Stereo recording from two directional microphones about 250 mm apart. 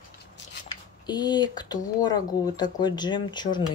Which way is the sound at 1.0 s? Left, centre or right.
Centre.